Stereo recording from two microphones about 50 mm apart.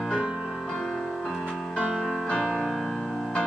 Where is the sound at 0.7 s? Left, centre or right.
Centre.